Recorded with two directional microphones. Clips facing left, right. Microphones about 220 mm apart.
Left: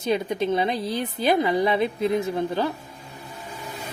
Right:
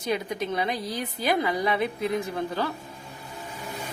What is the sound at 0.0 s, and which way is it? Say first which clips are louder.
A woman's voice: left 5 dB; 25° left (ahead or behind).